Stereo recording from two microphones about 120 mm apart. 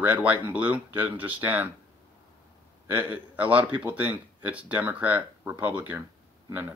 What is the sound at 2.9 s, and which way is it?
Speech, 15° right (ahead or behind).